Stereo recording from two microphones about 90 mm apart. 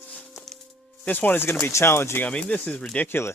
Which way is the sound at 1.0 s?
20° left (ahead or behind).